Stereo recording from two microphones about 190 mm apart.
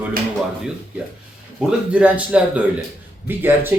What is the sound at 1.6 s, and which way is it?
Speech, 5° right (ahead or behind).